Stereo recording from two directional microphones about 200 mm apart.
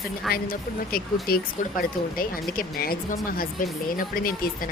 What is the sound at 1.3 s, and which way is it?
Speech, 50° left (ahead or behind).